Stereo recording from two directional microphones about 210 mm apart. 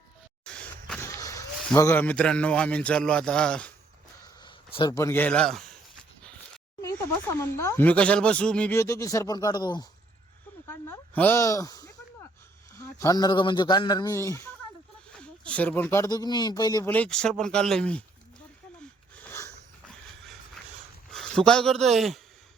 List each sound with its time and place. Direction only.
1.0 s a man's voice: 15° left (ahead or behind)
4.4 s speech: 20° left (ahead or behind); by 5.6 s 5° left (ahead or behind)
6.8 s speech: 15° left (ahead or behind)
19.2 s a sound: 10° left (ahead or behind)
21.1 s a man's voice: 5° left (ahead or behind)